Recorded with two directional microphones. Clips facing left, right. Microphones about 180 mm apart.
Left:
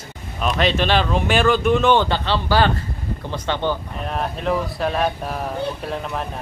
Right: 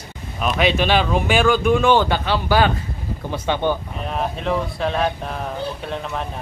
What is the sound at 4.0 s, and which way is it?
Speech, centre (ahead or behind).